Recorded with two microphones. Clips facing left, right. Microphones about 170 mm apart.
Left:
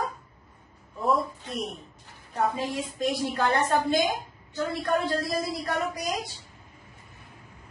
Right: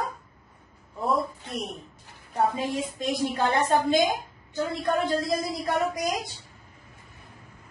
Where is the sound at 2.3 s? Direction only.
15° right (ahead or behind).